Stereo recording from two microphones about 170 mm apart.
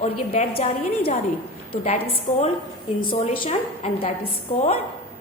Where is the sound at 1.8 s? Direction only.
40° left (ahead or behind).